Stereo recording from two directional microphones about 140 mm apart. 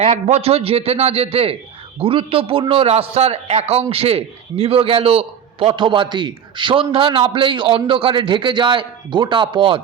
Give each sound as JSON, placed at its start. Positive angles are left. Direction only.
{"t": 0.0, "sound": "a man's voice", "side_deg": -50}